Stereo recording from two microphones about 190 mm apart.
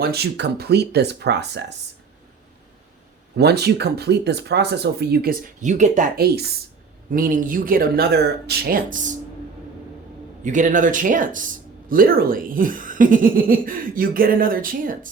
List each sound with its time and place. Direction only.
0.0 s speech: 55° right (ahead or behind)
3.3 s speech: 60° right (ahead or behind)
7.1 s speech: 45° right (ahead or behind)
10.4 s speech: 40° right (ahead or behind)